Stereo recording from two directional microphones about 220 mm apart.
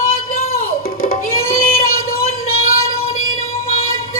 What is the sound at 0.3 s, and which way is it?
Music, 40° left (ahead or behind).